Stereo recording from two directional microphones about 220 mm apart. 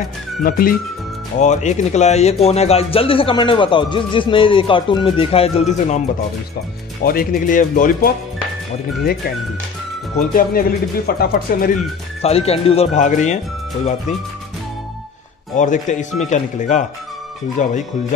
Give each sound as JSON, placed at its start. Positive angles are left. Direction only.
{"t": 0.4, "sound": "speech", "side_deg": 40}
{"t": 10.3, "sound": "speech", "side_deg": 45}
{"t": 12.2, "sound": "speech", "side_deg": 25}
{"t": 15.5, "sound": "speech", "side_deg": 35}